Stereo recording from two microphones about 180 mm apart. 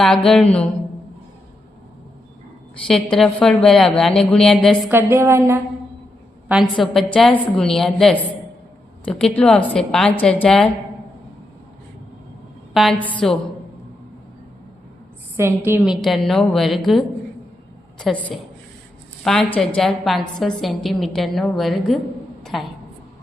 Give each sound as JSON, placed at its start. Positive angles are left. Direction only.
{"t": 0.0, "sound": "a woman's voice", "side_deg": 0}
{"t": 2.8, "sound": "a woman's voice", "side_deg": 5}
{"t": 4.9, "sound": "a woman's voice", "side_deg": -10}
{"t": 6.8, "sound": "a woman's voice", "side_deg": 0}
{"t": 12.7, "sound": "a woman's voice", "side_deg": 5}
{"t": 15.4, "sound": "a woman's voice", "side_deg": -15}